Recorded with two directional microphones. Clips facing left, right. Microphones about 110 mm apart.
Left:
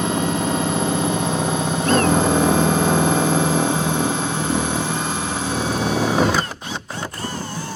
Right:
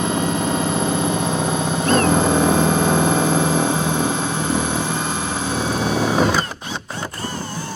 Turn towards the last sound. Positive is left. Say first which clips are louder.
# even
turn(degrees=-15)  # may be behind; listen again after turning